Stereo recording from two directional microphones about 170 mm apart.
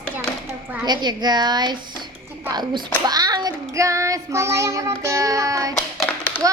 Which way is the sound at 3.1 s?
25° right (ahead or behind).